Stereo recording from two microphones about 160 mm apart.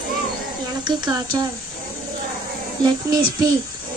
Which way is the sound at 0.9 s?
25° right (ahead or behind).